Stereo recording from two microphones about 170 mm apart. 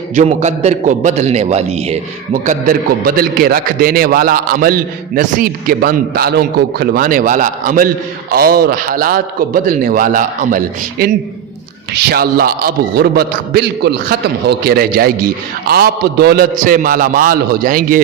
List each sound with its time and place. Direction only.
0.2 s a man's voice: 45° right (ahead or behind)
8.3 s a man's voice: 60° right (ahead or behind)